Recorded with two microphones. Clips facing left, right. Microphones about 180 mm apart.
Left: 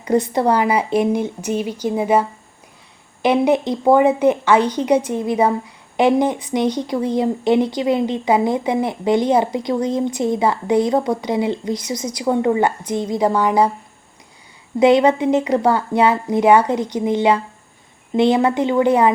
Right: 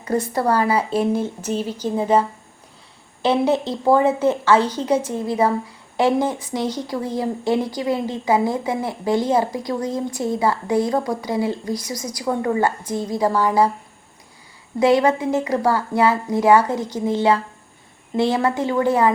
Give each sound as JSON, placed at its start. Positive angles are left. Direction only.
{"t": 0.0, "sound": "a woman's voice", "side_deg": 20}
{"t": 14.8, "sound": "speech", "side_deg": 20}